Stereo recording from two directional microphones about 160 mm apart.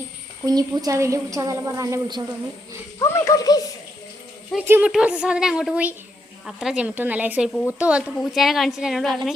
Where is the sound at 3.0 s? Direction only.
20° left (ahead or behind).